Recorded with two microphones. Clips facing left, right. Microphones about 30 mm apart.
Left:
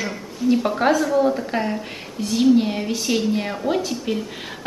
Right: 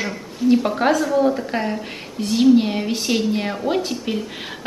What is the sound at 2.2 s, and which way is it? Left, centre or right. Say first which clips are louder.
A woman's voice: right 2 dB; centre.